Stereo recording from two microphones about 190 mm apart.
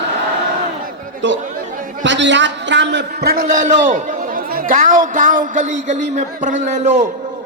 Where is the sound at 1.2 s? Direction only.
75° right (ahead or behind); by 7.0 s 40° right (ahead or behind).